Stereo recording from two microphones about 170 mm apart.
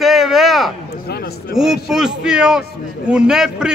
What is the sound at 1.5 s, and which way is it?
A man's voice, centre (ahead or behind).